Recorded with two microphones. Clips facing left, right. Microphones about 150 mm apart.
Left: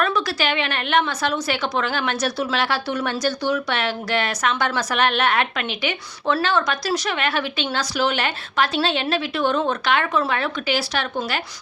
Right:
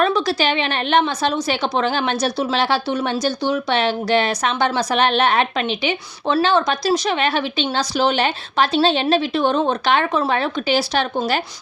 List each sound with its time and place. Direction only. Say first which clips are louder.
0.0 s a woman's voice: right 4 dB; 25° right (ahead or behind)